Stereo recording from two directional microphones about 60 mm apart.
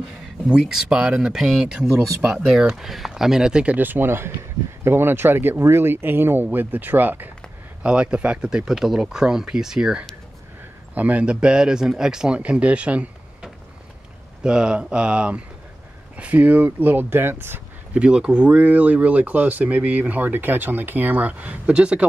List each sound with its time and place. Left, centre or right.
0.2 s speech: centre
3.7 s speech: right
7.8 s speech: centre
11.0 s speech: right
14.4 s speech: centre; by 17.6 s right
17.9 s speech: centre